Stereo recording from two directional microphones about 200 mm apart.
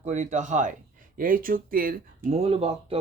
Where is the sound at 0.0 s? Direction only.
35° right (ahead or behind).